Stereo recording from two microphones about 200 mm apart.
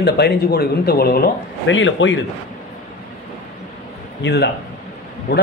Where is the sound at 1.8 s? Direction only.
70° left (ahead or behind).